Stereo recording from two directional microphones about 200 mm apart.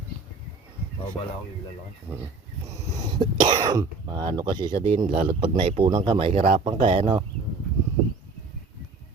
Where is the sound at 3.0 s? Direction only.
20° right (ahead or behind).